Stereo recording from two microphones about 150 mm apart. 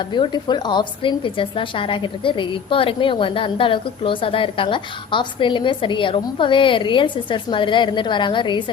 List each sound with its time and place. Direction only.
0.0 s a woman's voice: 30° left (ahead or behind)